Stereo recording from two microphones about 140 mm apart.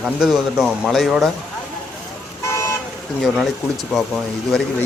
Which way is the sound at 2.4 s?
20° left (ahead or behind).